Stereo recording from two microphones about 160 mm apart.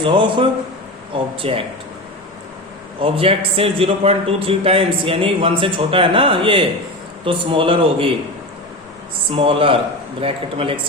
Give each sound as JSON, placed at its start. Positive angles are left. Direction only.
{"t": 0.0, "sound": "a man's voice", "side_deg": -30}
{"t": 3.0, "sound": "a man's voice", "side_deg": -35}
{"t": 9.3, "sound": "a man's voice", "side_deg": -35}